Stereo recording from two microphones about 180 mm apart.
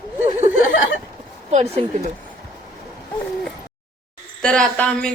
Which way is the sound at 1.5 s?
35° right (ahead or behind).